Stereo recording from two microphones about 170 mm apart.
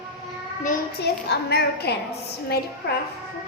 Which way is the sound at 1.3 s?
75° left (ahead or behind).